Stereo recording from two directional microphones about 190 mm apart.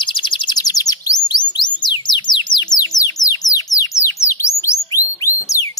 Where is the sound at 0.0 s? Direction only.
25° left (ahead or behind).